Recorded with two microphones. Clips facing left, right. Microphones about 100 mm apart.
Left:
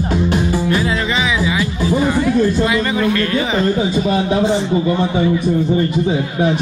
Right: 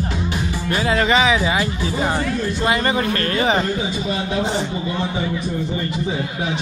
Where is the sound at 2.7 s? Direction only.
45° right (ahead or behind).